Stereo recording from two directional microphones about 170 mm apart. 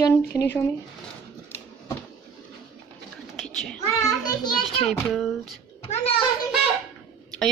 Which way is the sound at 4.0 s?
20° left (ahead or behind).